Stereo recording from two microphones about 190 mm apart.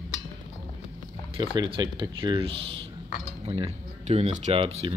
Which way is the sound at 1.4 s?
25° right (ahead or behind).